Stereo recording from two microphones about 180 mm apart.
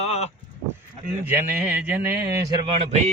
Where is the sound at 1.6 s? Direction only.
10° right (ahead or behind).